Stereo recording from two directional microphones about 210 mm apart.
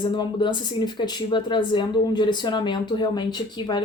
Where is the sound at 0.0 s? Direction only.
20° left (ahead or behind).